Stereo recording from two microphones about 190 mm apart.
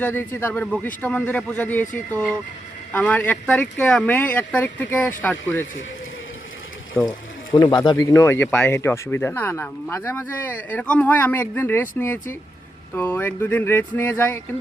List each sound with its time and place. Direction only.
0.0 s speech: 10° left (ahead or behind)
2.9 s speech: 10° left (ahead or behind)
7.0 s speech: centre (ahead or behind)
7.5 s speech: 20° left (ahead or behind)